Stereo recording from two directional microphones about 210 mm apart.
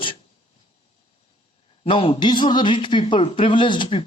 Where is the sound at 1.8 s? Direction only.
25° left (ahead or behind).